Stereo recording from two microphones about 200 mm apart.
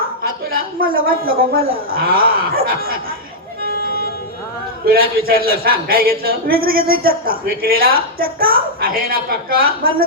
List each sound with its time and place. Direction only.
0.2 s a sound: 45° right (ahead or behind)
1.0 s a man's voice: 45° right (ahead or behind)
4.9 s a man's voice: 50° right (ahead or behind)